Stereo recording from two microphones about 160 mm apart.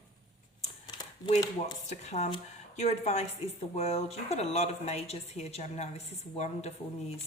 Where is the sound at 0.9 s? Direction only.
30° left (ahead or behind).